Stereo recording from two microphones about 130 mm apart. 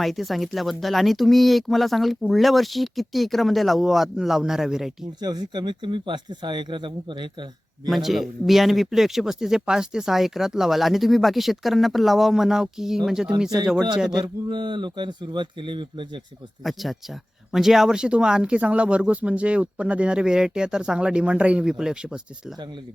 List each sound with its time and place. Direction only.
0.0 s speech: centre (ahead or behind)
5.2 s speech: 35° right (ahead or behind)
7.9 s speech: centre (ahead or behind)
14.5 s speech: 35° right (ahead or behind)
17.5 s speech: centre (ahead or behind)